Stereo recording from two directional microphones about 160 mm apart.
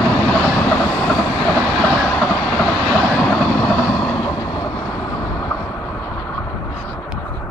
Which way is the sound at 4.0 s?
15° left (ahead or behind).